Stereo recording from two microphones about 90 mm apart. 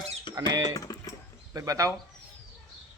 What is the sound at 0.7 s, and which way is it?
Typing, 40° left (ahead or behind).